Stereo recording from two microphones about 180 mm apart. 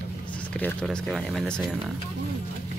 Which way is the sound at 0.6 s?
5° left (ahead or behind).